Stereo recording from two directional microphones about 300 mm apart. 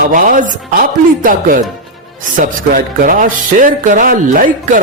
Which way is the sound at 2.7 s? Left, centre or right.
Right.